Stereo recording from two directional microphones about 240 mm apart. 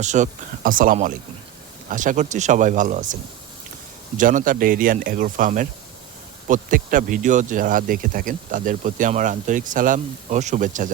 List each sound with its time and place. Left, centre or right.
0.0 s speech: right
4.2 s speech: right